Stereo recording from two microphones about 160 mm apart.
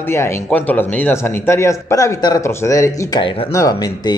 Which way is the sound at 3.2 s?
30° left (ahead or behind).